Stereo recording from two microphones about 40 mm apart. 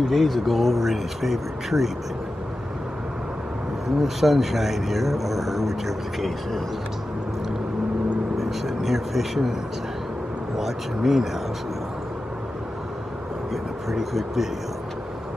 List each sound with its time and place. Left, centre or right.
0.0 s speech: centre
4.0 s speech: centre
8.4 s speech: centre
10.6 s speech: centre
13.5 s speech: centre